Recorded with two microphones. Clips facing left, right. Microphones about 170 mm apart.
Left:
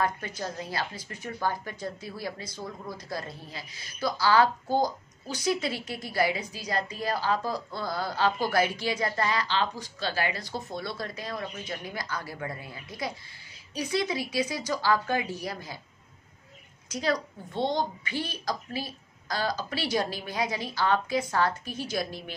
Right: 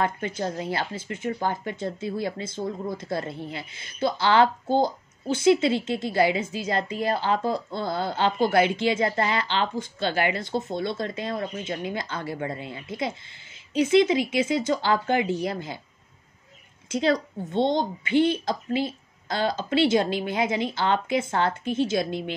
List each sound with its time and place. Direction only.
0.0 s speech: 25° right (ahead or behind)
16.9 s speech: 25° right (ahead or behind)